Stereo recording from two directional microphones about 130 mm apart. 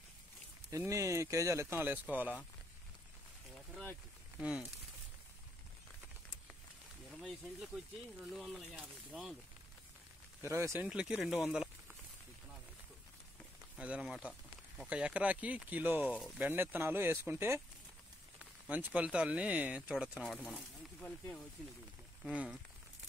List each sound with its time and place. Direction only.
0.7 s speech: 25° right (ahead or behind)
4.4 s speech: 5° right (ahead or behind)
7.1 s speech: centre (ahead or behind)
10.4 s speech: 20° right (ahead or behind)
10.9 s speech: 10° right (ahead or behind)
11.4 s a sound: 5° right (ahead or behind)
13.7 s speech: 10° right (ahead or behind)
20.2 s speech: 10° left (ahead or behind)
22.3 s speech: 10° right (ahead or behind)